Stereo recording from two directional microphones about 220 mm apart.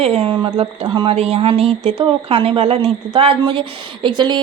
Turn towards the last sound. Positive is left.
turn(degrees=-20)  # may be behind; listen again after turning